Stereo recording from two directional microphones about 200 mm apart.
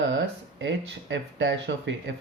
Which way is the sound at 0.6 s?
60° right (ahead or behind).